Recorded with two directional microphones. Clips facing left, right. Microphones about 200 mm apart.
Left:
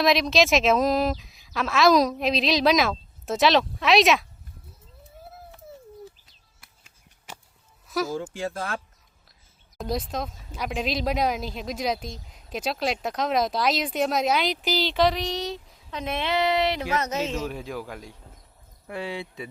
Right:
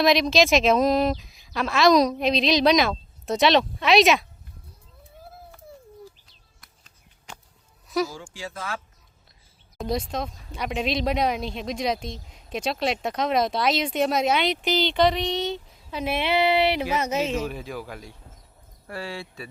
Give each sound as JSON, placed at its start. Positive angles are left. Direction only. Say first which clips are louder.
{"t": 0.0, "sound": "speech", "louder": "right 2 dB", "side_deg": 0}
{"t": 6.6, "sound": "a sound", "louder": "even", "side_deg": 5}
{"t": 7.9, "sound": "speech", "louder": "right 2 dB", "side_deg": 0}
{"t": 8.3, "sound": "speech", "louder": "left 4 dB", "side_deg": 55}
{"t": 9.7, "sound": "speech", "louder": "right 1 dB", "side_deg": 0}
{"t": 18.9, "sound": "speech", "louder": "left 2 dB", "side_deg": 20}